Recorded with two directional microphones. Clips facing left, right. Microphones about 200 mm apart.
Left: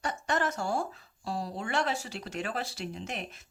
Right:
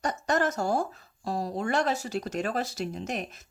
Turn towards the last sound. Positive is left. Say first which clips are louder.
# right 5 dB
turn(degrees=-40)  # may be behind; listen again after turning